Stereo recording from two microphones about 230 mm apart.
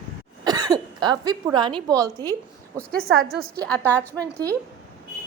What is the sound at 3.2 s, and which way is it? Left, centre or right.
A woman's voice, centre.